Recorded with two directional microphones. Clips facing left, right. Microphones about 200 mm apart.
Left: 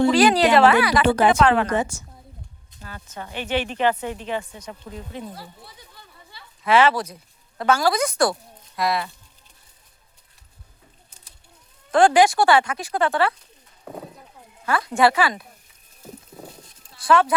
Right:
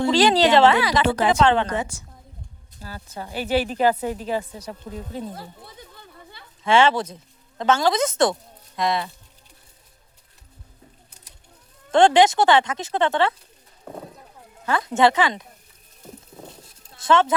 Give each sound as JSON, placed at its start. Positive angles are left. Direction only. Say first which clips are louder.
{"t": 0.1, "sound": "a woman's voice", "louder": "left 1 dB", "side_deg": -25}
{"t": 1.0, "sound": "a woman's voice", "louder": "left 1 dB", "side_deg": 55}
{"t": 2.8, "sound": "speech", "louder": "right 2 dB", "side_deg": -35}
{"t": 5.3, "sound": "a sound", "louder": "right 2 dB", "side_deg": -50}
{"t": 6.7, "sound": "a woman's voice", "louder": "even", "side_deg": -25}
{"t": 11.9, "sound": "a woman's voice", "louder": "even", "side_deg": -25}
{"t": 14.6, "sound": "a woman's voice", "louder": "even", "side_deg": -20}
{"t": 16.0, "sound": "a sound", "louder": "left 1 dB", "side_deg": 5}
{"t": 17.0, "sound": "speech", "louder": "even", "side_deg": -25}